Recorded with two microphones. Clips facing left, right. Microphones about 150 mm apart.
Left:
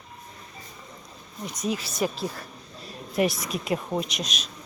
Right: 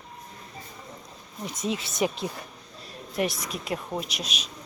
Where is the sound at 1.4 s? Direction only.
25° right (ahead or behind).